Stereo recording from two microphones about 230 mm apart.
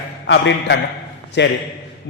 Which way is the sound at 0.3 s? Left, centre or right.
Left.